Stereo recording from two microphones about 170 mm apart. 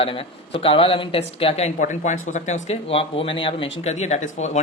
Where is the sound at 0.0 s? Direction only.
35° left (ahead or behind).